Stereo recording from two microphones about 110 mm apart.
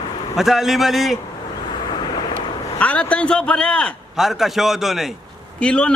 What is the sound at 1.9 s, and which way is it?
Vehicle, 45° left (ahead or behind).